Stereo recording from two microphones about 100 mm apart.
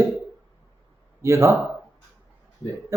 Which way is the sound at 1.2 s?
30° right (ahead or behind).